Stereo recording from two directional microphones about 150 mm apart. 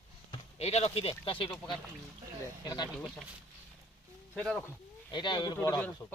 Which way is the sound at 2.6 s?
25° left (ahead or behind).